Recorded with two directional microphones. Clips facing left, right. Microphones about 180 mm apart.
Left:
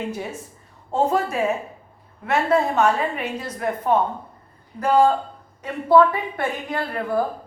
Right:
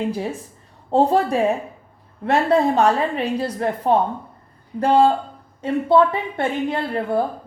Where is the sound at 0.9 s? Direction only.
35° right (ahead or behind).